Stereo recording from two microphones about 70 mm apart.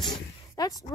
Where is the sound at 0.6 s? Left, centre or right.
Left.